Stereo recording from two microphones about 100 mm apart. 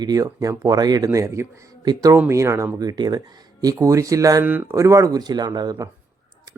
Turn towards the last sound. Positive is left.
turn(degrees=-40)  # may be behind; listen again after turning